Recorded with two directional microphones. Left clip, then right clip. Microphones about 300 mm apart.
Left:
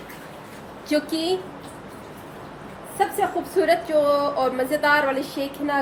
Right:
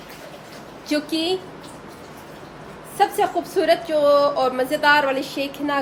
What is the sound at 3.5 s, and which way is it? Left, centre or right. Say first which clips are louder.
Speech: left 1 dB; centre.